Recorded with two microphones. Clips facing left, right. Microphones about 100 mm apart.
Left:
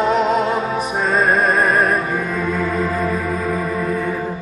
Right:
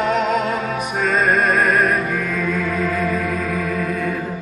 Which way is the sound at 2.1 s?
25° left (ahead or behind).